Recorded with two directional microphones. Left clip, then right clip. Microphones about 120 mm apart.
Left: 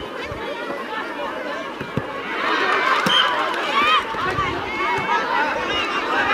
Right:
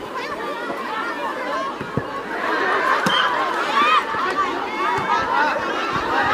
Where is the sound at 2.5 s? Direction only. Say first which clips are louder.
Even; 10° left (ahead or behind).